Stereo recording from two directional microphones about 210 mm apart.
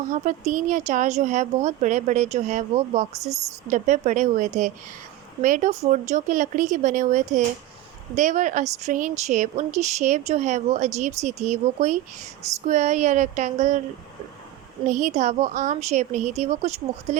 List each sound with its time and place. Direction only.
0.0 s speech: 35° right (ahead or behind)
14.8 s speech: 35° right (ahead or behind)